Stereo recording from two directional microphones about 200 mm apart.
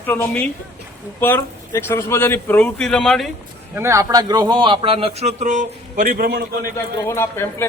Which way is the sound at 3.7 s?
15° right (ahead or behind).